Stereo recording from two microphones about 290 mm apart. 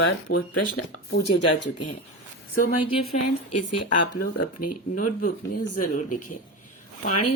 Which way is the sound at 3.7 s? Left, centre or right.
Left.